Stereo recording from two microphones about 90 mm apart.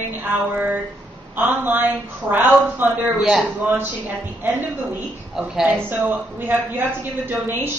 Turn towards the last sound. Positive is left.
turn(degrees=-20)  # may be behind; listen again after turning